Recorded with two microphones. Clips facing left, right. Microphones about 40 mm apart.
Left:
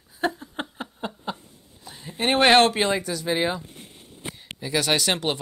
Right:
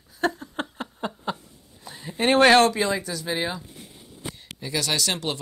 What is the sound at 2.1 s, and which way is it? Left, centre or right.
Speech, left.